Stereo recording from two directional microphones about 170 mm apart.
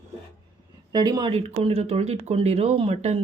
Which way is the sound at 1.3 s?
40° right (ahead or behind).